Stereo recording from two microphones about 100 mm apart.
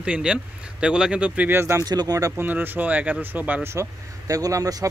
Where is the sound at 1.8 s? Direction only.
40° right (ahead or behind).